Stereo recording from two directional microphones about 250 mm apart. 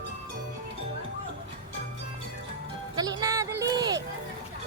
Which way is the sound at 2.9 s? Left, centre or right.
Centre.